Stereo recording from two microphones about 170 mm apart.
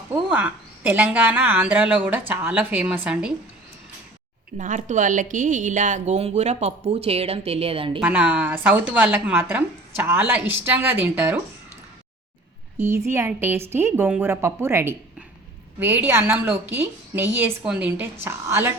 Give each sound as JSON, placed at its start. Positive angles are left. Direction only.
{"t": 0.1, "sound": "a woman's voice", "side_deg": -10}
{"t": 4.5, "sound": "speech", "side_deg": -45}
{"t": 7.9, "sound": "a woman's voice", "side_deg": -5}
{"t": 12.7, "sound": "a woman's voice", "side_deg": -15}